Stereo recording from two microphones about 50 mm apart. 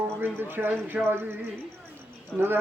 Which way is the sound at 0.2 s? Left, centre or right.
Right.